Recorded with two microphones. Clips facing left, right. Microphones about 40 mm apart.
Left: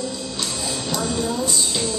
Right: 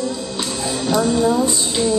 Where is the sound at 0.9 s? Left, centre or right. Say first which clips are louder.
Right 9 dB; centre.